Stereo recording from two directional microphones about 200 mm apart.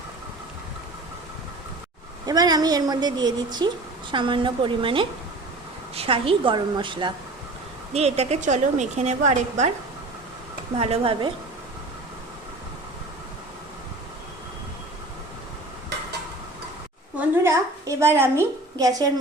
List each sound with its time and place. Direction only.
2.2 s a woman's voice: 20° right (ahead or behind); by 9.7 s 35° right (ahead or behind)
10.8 s a woman's voice: 30° right (ahead or behind)
17.2 s a woman's voice: 10° right (ahead or behind)